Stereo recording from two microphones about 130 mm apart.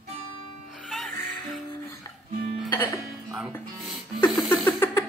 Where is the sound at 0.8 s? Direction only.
Centre (ahead or behind).